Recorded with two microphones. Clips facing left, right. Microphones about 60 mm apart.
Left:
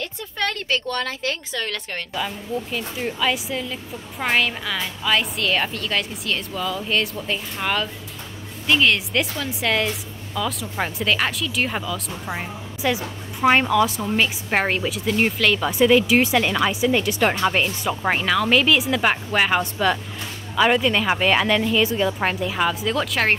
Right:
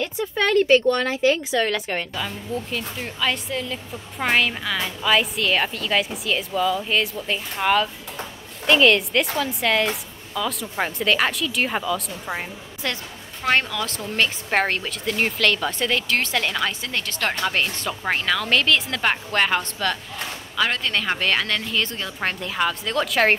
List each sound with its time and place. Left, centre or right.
0.4 s a woman's voice: centre
2.1 s speech: centre
12.8 s speech: centre